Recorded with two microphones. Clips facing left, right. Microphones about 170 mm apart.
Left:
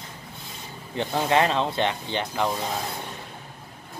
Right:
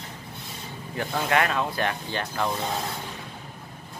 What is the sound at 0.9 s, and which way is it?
Speech, 25° left (ahead or behind).